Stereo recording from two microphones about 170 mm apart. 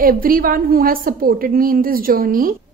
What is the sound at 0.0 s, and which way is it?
A woman's voice, 60° right (ahead or behind).